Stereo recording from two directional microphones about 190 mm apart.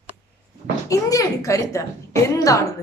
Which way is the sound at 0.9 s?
15° left (ahead or behind).